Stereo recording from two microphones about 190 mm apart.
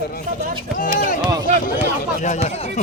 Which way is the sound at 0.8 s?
45° left (ahead or behind).